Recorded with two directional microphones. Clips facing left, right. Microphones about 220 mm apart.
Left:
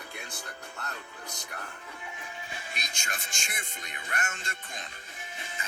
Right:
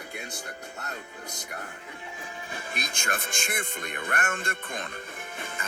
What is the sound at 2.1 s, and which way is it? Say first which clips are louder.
Speech: right 4 dB; 40° right (ahead or behind).